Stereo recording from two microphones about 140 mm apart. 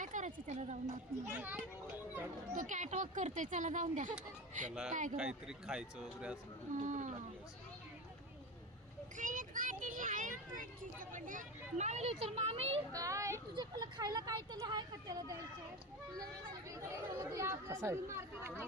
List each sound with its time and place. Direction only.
0.0 s a sound: 65° right (ahead or behind)
1.3 s speech: 15° right (ahead or behind)
2.6 s speech: 60° right (ahead or behind)
5.1 s speech: 5° right (ahead or behind)
6.7 s speech: 65° right (ahead or behind)
9.1 s a sound: 70° right (ahead or behind); by 12.8 s 45° right (ahead or behind)
12.9 s speech: 25° right (ahead or behind)
16.8 s speech: 20° right (ahead or behind)